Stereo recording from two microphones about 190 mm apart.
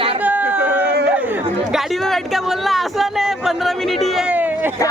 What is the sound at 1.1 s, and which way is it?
Chatter, 10° right (ahead or behind).